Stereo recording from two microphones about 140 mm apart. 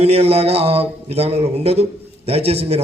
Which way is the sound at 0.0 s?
45° right (ahead or behind).